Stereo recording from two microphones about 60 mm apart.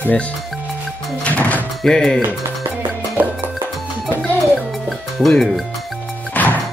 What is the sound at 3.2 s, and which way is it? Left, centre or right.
Music, right.